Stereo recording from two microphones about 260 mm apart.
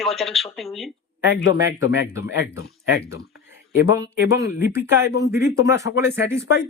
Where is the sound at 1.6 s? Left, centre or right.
Centre.